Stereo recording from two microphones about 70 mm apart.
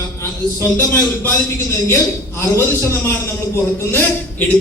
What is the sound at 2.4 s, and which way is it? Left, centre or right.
Speech, left.